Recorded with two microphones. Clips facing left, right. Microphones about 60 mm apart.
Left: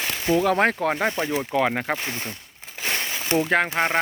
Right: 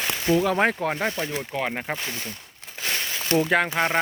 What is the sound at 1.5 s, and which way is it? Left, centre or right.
Speech, left.